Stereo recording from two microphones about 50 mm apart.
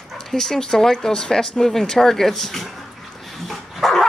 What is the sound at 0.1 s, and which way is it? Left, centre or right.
Speech, centre.